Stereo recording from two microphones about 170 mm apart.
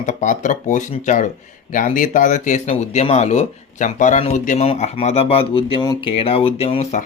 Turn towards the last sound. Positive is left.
turn(degrees=35)  # may be behind; listen again after turning